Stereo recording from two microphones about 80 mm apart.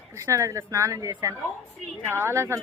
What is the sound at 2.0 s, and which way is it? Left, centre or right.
Speech, right.